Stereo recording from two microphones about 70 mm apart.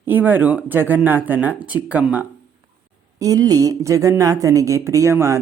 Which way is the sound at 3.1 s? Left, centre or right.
Right.